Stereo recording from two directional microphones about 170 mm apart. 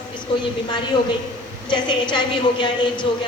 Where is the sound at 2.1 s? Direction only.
25° left (ahead or behind).